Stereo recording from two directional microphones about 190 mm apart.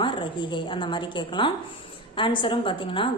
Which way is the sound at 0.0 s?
25° left (ahead or behind).